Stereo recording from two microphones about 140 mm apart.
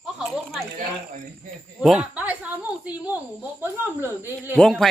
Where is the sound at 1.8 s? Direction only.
5° right (ahead or behind).